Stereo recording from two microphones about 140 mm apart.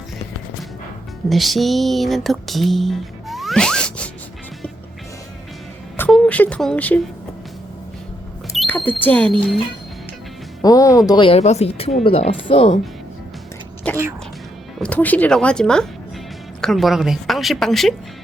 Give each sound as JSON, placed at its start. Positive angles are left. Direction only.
{"t": 1.3, "sound": "music", "side_deg": 0}
{"t": 6.0, "sound": "speech", "side_deg": 5}
{"t": 8.5, "sound": "a sound", "side_deg": 5}
{"t": 9.0, "sound": "speech", "side_deg": 10}
{"t": 10.6, "sound": "speech", "side_deg": 25}
{"t": 11.3, "sound": "speech", "side_deg": 50}
{"t": 13.8, "sound": "a sound", "side_deg": 10}
{"t": 14.8, "sound": "a woman's voice", "side_deg": 10}